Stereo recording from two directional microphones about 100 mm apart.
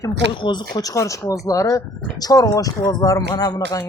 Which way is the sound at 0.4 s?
45° left (ahead or behind).